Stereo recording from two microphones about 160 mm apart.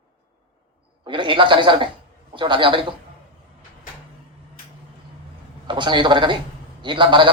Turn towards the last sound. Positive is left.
turn(degrees=-30)  # may be behind; listen again after turning